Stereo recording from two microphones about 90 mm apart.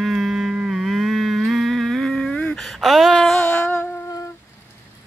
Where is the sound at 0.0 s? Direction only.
5° right (ahead or behind); by 3.7 s 15° left (ahead or behind).